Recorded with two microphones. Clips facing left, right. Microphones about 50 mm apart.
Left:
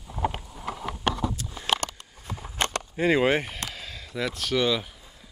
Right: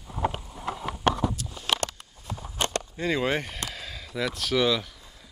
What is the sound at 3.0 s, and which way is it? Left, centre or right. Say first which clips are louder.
Speech: left 5 dB; left.